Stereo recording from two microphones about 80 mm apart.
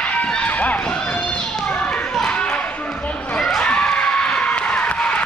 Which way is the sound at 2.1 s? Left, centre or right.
Centre.